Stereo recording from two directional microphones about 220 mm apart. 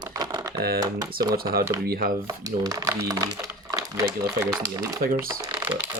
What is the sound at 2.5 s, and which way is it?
Speech, 15° right (ahead or behind).